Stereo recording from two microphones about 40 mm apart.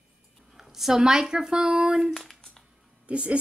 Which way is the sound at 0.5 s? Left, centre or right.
Centre.